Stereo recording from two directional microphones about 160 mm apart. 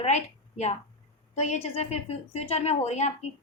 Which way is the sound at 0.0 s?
45° left (ahead or behind).